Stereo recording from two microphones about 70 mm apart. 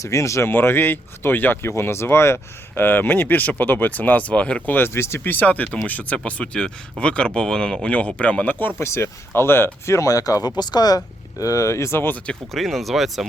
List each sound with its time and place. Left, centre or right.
0.0 s speech: left; by 4.7 s centre
4.7 s speech: left
5.3 s speech: left
8.8 s speech: left
9.8 s speech: left
10.6 s speech: left
12.1 s speech: centre
12.5 s speech: centre